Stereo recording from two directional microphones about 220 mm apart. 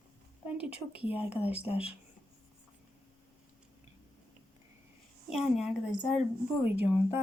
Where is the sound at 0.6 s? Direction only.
5° right (ahead or behind).